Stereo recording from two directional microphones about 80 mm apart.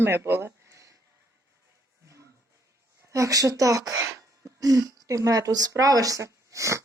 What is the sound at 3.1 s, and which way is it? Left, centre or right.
Speech, right.